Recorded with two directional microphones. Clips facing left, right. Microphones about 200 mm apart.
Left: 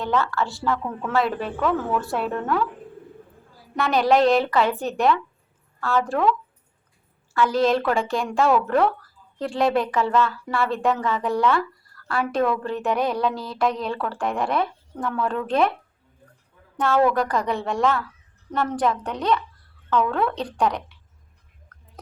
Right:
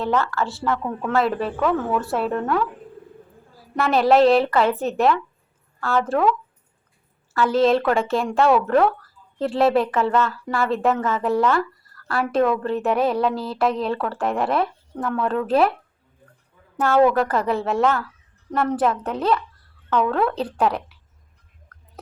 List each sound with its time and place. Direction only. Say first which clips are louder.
0.0 s a woman's voice: right 1 dB; centre (ahead or behind)
3.8 s a woman's voice: right 3 dB; centre (ahead or behind)
7.3 s a woman's voice: right 2 dB; centre (ahead or behind)
13.3 s a woman's voice: right 5 dB; 30° right (ahead or behind)
13.8 s a woman's voice: right 3 dB; centre (ahead or behind)
16.7 s a woman's voice: right 3 dB; 5° right (ahead or behind)